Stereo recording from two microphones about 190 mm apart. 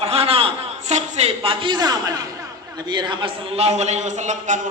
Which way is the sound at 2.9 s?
25° right (ahead or behind).